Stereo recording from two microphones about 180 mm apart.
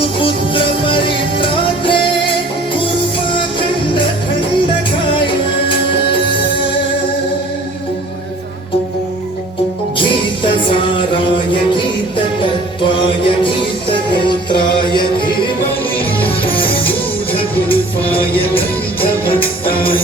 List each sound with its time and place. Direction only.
0.2 s music: 30° left (ahead or behind)
5.1 s music: 30° left (ahead or behind)
10.0 s music: 30° left (ahead or behind)
19.6 s music: 30° left (ahead or behind)